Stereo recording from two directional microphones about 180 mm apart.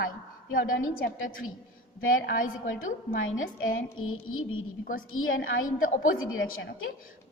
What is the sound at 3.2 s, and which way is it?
Speech, 90° left.